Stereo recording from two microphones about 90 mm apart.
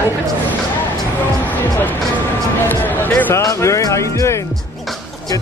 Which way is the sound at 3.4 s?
35° left (ahead or behind).